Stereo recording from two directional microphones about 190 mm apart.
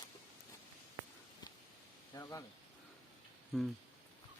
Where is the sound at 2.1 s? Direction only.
20° left (ahead or behind).